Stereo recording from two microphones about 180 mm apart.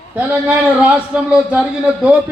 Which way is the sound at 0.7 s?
5° right (ahead or behind).